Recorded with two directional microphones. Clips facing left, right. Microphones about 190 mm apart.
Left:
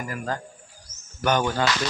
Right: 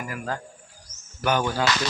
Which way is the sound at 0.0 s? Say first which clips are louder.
Left 1 dB; 5° right (ahead or behind).